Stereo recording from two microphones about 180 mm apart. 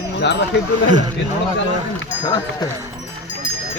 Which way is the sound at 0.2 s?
70° left (ahead or behind).